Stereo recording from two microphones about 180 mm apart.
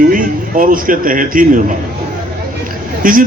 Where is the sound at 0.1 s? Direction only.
50° right (ahead or behind).